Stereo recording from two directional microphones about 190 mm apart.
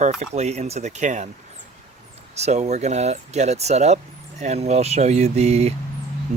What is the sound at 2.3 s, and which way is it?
Speech, 35° right (ahead or behind).